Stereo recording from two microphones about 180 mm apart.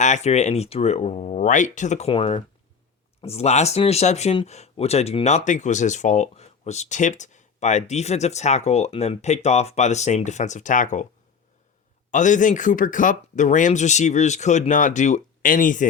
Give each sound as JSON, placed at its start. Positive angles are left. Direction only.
{"t": 0.0, "sound": "speech", "side_deg": 40}
{"t": 12.1, "sound": "speech", "side_deg": 45}